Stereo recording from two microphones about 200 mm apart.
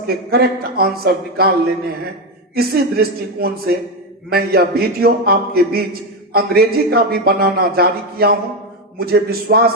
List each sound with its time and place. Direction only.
0.1 s a man's voice: 50° right (ahead or behind)
2.6 s a man's voice: 50° right (ahead or behind)